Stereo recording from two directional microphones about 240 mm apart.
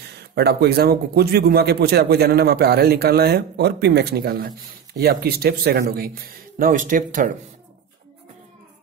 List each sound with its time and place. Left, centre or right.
0.0 s speech: right